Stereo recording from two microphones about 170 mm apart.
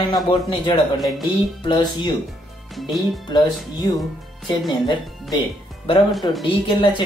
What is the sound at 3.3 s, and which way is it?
Speech, 25° left (ahead or behind).